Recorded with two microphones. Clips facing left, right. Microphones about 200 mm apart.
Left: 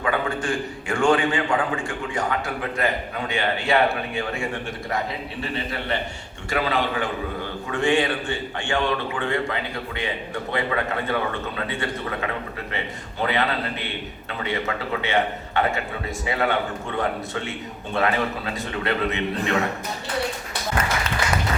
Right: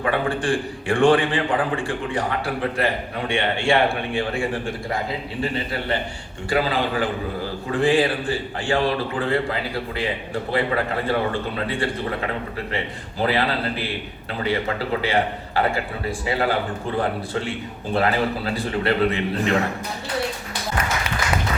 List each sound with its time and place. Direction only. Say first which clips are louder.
0.1 s a man's voice: right 2 dB; 30° right (ahead or behind)